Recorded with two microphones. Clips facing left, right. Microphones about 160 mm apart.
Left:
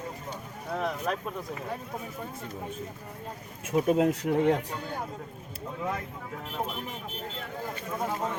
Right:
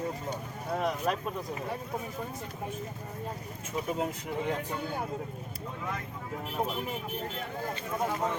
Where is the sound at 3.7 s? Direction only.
85° left.